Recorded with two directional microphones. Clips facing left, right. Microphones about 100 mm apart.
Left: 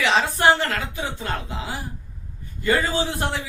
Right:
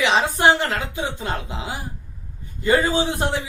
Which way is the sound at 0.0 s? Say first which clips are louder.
Right 1 dB; 20° right (ahead or behind).